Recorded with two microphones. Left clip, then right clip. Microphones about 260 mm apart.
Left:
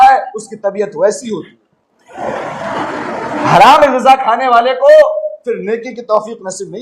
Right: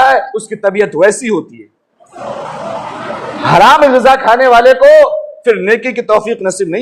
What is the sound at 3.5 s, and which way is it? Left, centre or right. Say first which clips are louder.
A man's voice: right 1 dB; right.